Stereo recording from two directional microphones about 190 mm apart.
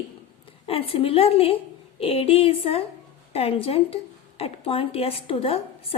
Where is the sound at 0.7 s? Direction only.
30° left (ahead or behind).